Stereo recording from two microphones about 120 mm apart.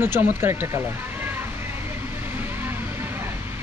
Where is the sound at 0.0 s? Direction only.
15° right (ahead or behind).